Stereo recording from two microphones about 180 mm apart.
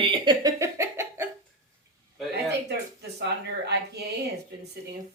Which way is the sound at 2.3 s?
70° right (ahead or behind).